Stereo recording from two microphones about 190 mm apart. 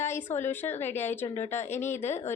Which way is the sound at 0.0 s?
10° left (ahead or behind).